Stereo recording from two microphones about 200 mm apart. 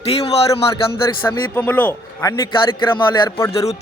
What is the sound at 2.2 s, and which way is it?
A man's voice, 20° left (ahead or behind).